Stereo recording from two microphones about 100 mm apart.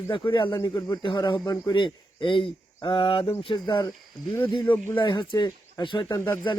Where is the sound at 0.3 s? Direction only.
55° left (ahead or behind).